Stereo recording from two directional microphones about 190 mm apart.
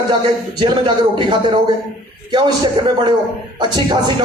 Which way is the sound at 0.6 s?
25° right (ahead or behind).